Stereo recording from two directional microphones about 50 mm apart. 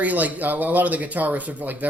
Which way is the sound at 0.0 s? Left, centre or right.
Right.